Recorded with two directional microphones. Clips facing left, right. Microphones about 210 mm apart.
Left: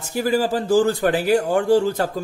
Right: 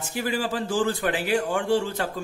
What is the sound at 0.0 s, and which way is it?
A man's voice, 40° left (ahead or behind).